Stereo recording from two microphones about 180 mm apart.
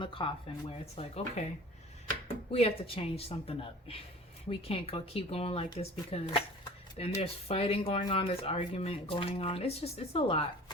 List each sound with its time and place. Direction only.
0.0 s speech: 30° left (ahead or behind)